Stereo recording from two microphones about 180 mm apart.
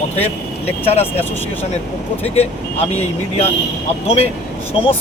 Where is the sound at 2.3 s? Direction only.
35° left (ahead or behind).